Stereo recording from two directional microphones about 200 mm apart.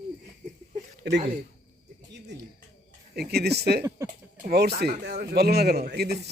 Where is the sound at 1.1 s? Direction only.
55° right (ahead or behind).